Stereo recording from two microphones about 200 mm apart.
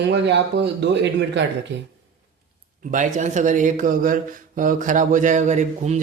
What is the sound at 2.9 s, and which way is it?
A man's voice, 40° right (ahead or behind).